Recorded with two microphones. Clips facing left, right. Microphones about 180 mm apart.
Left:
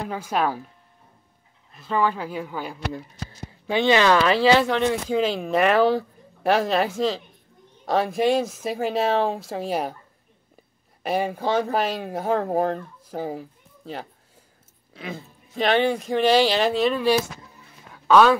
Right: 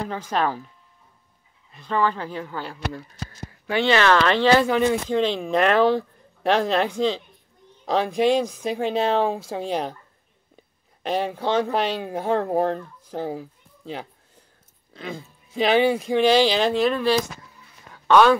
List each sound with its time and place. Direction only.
0.0 s speech: 10° left (ahead or behind)
1.7 s speech: 5° left (ahead or behind)
17.9 s a sound: centre (ahead or behind)